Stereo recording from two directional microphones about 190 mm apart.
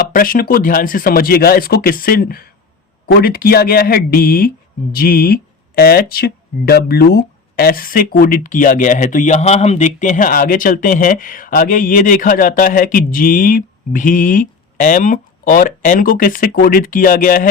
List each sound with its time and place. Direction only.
0.1 s speech: 50° left (ahead or behind)